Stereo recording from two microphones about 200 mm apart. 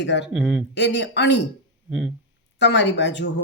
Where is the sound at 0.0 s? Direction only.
65° left (ahead or behind).